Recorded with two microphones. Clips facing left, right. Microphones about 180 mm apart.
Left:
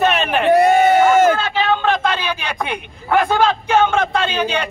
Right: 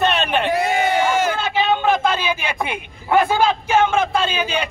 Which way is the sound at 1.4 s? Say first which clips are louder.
Left 1 dB; 15° right (ahead or behind).